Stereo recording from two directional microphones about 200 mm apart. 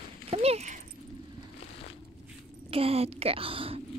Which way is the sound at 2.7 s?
30° right (ahead or behind).